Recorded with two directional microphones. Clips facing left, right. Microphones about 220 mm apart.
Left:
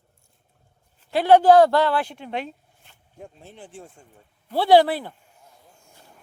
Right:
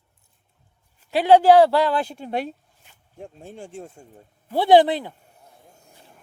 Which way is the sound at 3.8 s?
25° right (ahead or behind).